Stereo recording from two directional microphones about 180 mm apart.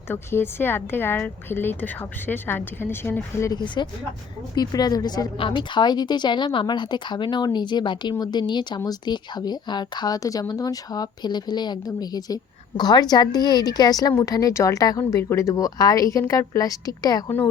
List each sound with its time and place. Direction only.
0.1 s a woman's voice: 15° left (ahead or behind)